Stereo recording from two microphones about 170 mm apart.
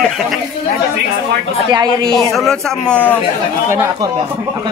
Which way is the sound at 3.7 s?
15° right (ahead or behind).